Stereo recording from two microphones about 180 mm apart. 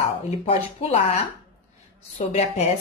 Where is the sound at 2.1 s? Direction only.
35° left (ahead or behind).